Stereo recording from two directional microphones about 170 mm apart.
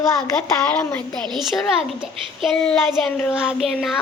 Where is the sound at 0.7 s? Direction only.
5° left (ahead or behind).